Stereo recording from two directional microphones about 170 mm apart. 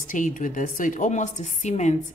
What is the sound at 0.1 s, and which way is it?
A woman's voice, 50° left (ahead or behind).